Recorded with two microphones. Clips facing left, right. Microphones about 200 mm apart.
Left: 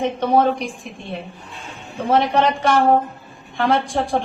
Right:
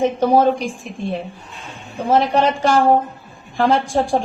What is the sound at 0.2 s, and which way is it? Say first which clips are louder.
Speech: right 1 dB; 30° right (ahead or behind).